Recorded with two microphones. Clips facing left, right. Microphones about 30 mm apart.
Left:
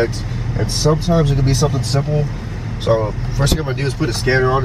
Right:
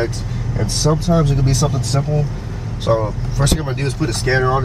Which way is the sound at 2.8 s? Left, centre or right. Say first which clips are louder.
Left 1 dB; centre.